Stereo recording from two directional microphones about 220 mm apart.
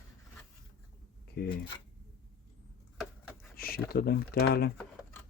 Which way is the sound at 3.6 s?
45° left (ahead or behind).